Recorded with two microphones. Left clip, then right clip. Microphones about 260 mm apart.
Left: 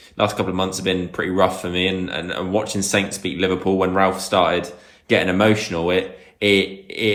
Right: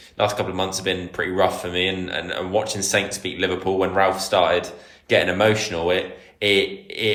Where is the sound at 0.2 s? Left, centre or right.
Centre.